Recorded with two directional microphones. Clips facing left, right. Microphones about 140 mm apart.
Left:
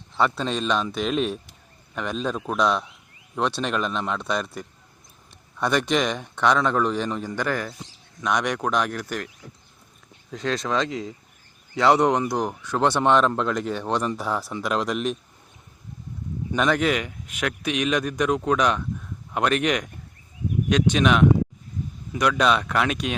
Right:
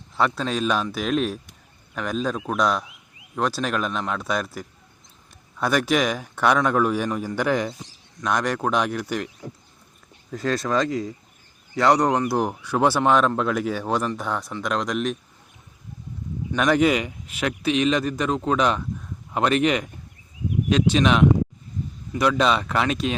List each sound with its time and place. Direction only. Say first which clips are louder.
0.2 s a man's voice: right 1 dB; centre (ahead or behind)
8.2 s a man's voice: right 1 dB; centre (ahead or behind)
10.3 s a man's voice: right 2 dB; 5° right (ahead or behind)
12.3 s a man's voice: right 2 dB; 10° right (ahead or behind)
16.6 s a man's voice: right 3 dB; 5° right (ahead or behind)